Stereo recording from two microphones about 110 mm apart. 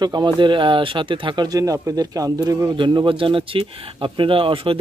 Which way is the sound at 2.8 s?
50° right (ahead or behind).